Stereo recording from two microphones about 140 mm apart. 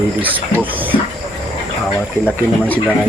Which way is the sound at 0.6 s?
15° right (ahead or behind).